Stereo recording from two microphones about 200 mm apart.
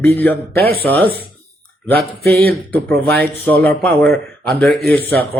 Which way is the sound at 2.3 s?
10° left (ahead or behind).